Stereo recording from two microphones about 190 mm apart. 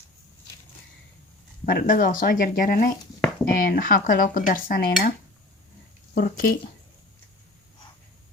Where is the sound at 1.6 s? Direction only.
50° left (ahead or behind).